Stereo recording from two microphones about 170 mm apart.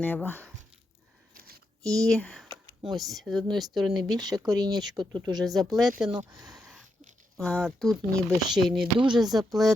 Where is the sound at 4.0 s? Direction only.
25° right (ahead or behind).